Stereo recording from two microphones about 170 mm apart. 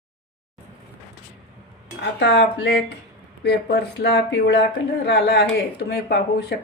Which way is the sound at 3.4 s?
75° left (ahead or behind).